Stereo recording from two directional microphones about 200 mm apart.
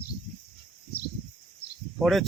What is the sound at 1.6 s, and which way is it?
Cricket, 50° left (ahead or behind).